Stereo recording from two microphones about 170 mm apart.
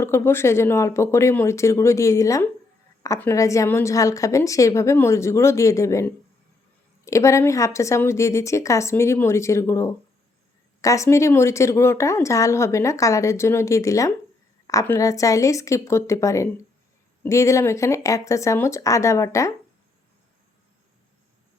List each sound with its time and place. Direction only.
0.0 s speech: 15° left (ahead or behind)